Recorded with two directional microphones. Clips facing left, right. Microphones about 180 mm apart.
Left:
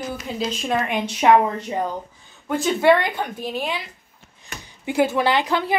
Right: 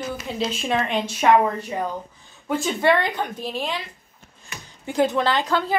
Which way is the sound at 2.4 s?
Centre (ahead or behind).